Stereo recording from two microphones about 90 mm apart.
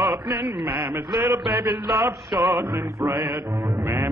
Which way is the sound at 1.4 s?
55° right (ahead or behind).